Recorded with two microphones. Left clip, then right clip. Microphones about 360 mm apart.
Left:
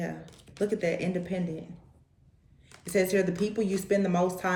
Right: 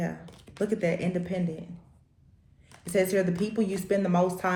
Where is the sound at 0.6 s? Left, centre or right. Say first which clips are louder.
Right 1 dB; right.